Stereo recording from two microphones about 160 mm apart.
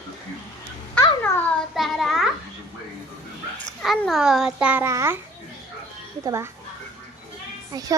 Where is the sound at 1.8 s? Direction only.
Centre (ahead or behind).